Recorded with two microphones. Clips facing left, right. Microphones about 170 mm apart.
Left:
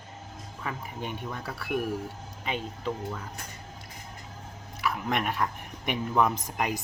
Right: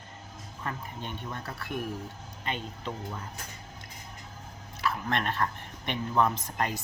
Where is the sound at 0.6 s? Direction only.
5° left (ahead or behind).